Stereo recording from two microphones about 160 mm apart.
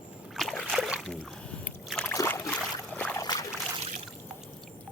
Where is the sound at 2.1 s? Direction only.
20° left (ahead or behind).